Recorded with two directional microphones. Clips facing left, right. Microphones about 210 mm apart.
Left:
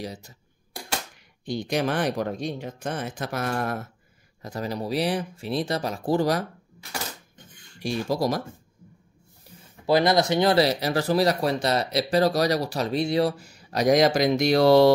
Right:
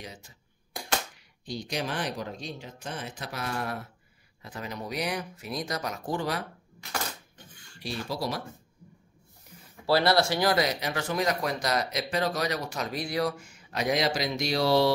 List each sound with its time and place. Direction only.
0.0 s speech: 40° left (ahead or behind)
1.4 s speech: 55° left (ahead or behind)
7.8 s speech: 45° left (ahead or behind)
9.8 s speech: 20° left (ahead or behind); by 14.9 s 50° left (ahead or behind)